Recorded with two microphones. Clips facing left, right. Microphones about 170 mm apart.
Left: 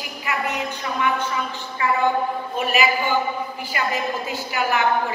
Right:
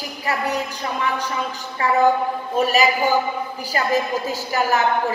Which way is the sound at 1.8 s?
40° right (ahead or behind).